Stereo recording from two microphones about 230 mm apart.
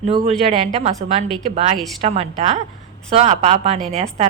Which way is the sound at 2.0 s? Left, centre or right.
Right.